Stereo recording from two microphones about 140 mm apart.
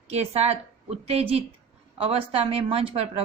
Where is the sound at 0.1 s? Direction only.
45° right (ahead or behind).